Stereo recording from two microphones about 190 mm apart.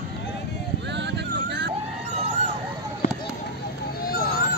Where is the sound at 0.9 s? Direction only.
65° right (ahead or behind).